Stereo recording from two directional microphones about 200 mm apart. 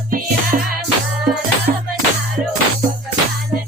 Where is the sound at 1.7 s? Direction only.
40° right (ahead or behind).